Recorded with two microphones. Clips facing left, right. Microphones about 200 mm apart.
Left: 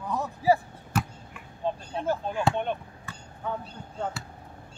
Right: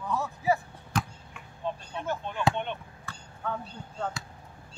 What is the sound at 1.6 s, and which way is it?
Speech, 30° left (ahead or behind).